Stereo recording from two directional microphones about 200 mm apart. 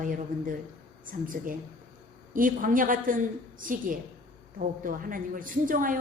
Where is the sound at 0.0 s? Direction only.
45° right (ahead or behind).